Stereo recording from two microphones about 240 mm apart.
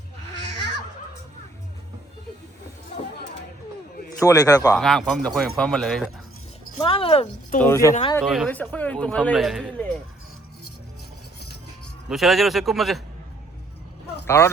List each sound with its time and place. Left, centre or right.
4.2 s a man's voice: centre
4.8 s speech: centre
6.7 s speech: left
7.6 s a man's voice: centre
8.2 s speech: centre
12.0 s speech: centre
14.3 s speech: centre